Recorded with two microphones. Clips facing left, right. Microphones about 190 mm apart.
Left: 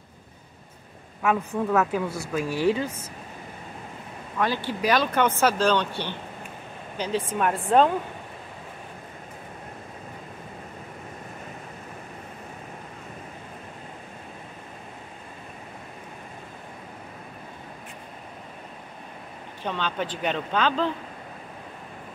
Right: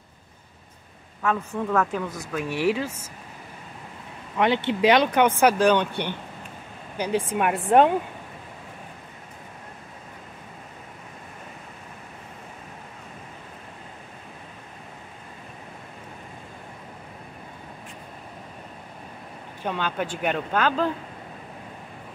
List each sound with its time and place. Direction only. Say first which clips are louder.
1.2 s speech: left 2 dB; 10° left (ahead or behind)
4.4 s speech: right 5 dB; 20° right (ahead or behind)
19.6 s speech: right 1 dB; 10° right (ahead or behind)